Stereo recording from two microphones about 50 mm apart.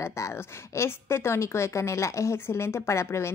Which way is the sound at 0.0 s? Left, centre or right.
Left.